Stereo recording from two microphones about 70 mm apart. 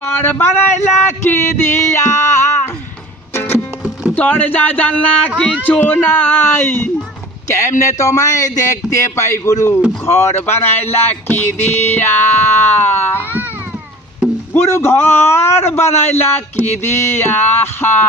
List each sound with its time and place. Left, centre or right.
0.0 s speech: left
3.3 s music: left
4.2 s speech: left
7.5 s speech: left
14.7 s speech: left